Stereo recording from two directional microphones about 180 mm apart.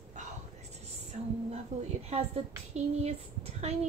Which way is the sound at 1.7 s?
40° right (ahead or behind).